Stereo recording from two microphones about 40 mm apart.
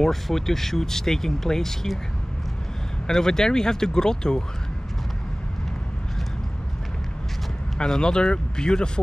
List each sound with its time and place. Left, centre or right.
0.0 s speech: centre
3.1 s speech: centre
7.7 s speech: centre